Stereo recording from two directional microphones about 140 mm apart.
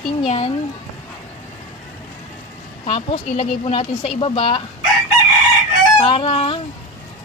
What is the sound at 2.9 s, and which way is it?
Speech, 40° left (ahead or behind).